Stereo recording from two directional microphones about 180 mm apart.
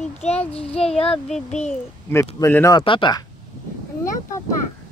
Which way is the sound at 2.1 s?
15° left (ahead or behind).